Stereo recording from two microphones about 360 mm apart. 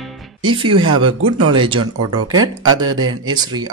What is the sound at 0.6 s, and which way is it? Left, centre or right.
Speech, centre.